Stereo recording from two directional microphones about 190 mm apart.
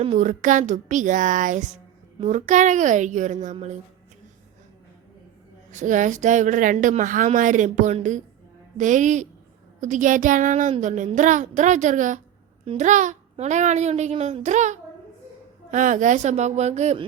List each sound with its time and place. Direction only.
0.0 s a woman's voice: 35° right (ahead or behind)
5.7 s a woman's voice: 40° right (ahead or behind)